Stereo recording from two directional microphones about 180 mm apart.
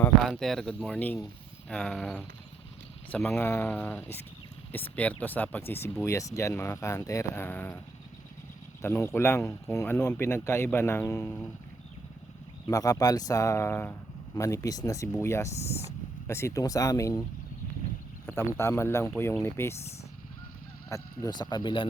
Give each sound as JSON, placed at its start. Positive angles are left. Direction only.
{"t": 0.2, "sound": "speech", "side_deg": 0}
{"t": 8.8, "sound": "speech", "side_deg": 15}
{"t": 12.6, "sound": "speech", "side_deg": 20}
{"t": 18.3, "sound": "speech", "side_deg": 15}
{"t": 20.9, "sound": "speech", "side_deg": 20}